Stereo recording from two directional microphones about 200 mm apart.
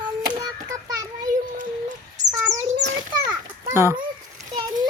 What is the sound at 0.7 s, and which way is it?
Child singing, 20° right (ahead or behind).